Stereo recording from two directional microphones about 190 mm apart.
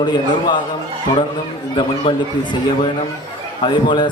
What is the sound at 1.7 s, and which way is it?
Speech, 25° left (ahead or behind).